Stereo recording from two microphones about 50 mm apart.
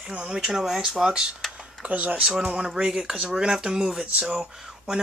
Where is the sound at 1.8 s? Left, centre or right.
Right.